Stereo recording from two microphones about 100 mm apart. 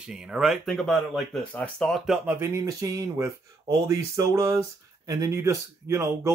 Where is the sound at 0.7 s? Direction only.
5° left (ahead or behind).